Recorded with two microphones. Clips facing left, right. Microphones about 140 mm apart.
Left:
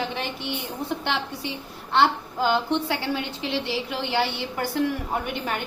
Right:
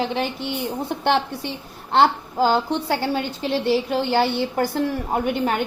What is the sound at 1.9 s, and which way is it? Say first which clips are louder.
A woman's voice: right 4 dB; 40° right (ahead or behind).